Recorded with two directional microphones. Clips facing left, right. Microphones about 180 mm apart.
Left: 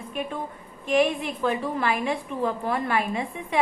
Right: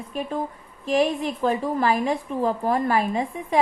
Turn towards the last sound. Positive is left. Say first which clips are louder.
# right 4 dB
turn(degrees=-40)  # may be behind; listen again after turning